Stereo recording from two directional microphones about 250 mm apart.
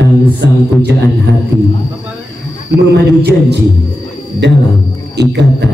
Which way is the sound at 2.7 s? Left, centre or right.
Right.